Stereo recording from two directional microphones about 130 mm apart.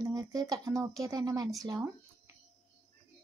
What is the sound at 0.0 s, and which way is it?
Speech, 30° right (ahead or behind).